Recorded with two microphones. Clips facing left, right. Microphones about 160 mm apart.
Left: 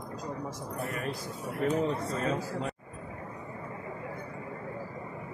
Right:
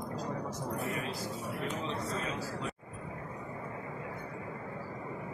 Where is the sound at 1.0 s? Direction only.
50° left (ahead or behind).